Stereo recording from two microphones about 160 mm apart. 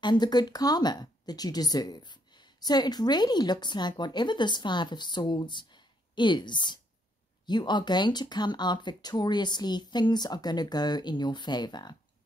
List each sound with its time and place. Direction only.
0.0 s speech: 25° left (ahead or behind)